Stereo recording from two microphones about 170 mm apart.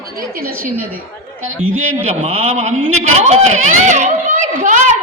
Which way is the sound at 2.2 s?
35° right (ahead or behind).